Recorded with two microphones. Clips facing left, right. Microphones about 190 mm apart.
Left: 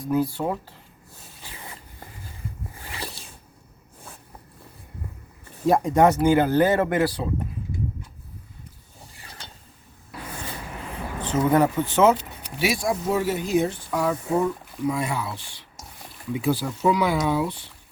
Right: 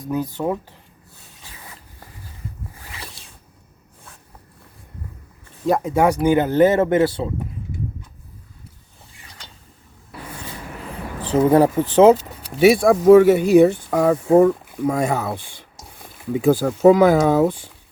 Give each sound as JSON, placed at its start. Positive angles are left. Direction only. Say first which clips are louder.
{"t": 0.0, "sound": "speech", "louder": "even", "side_deg": -20}
{"t": 5.6, "sound": "speech", "louder": "even", "side_deg": 0}
{"t": 6.2, "sound": "speech", "louder": "right 3 dB", "side_deg": -20}
{"t": 11.2, "sound": "speech", "louder": "right 5 dB", "side_deg": -35}
{"t": 12.6, "sound": "speech", "louder": "right 13 dB", "side_deg": -55}